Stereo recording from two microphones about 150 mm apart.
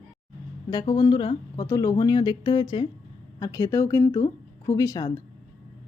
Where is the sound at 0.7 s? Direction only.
25° left (ahead or behind).